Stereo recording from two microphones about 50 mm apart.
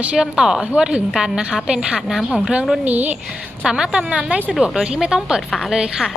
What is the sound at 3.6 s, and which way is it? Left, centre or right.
A woman's voice, centre.